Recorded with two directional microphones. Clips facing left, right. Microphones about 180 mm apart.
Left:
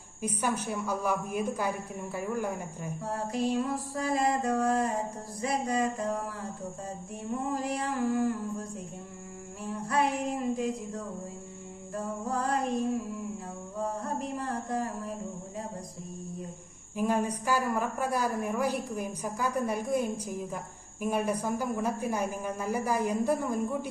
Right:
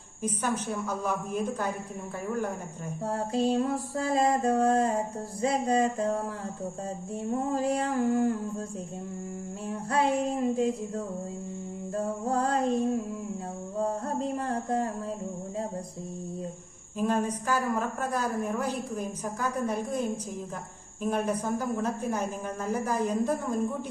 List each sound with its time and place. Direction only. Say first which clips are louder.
0.2 s a woman's voice: right 1 dB; 10° left (ahead or behind)
3.0 s music: right 4 dB; 30° right (ahead or behind)
9.9 s music: right 3 dB; 30° right (ahead or behind)
17.0 s a woman's voice: right 1 dB; 10° left (ahead or behind)